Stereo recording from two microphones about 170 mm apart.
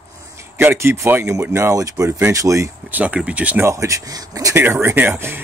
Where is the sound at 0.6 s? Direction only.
15° right (ahead or behind).